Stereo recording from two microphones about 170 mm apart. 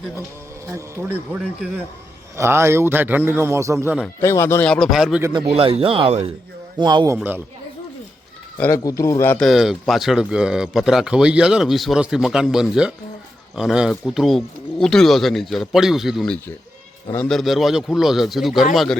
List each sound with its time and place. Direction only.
0.7 s a man's voice: 15° right (ahead or behind)
4.2 s speech: 15° left (ahead or behind)
4.7 s speech: centre (ahead or behind)
5.5 s speech: 35° right (ahead or behind)
6.7 s speech: 25° right (ahead or behind)
8.5 s a man's voice: 10° left (ahead or behind)
9.4 s speech: centre (ahead or behind)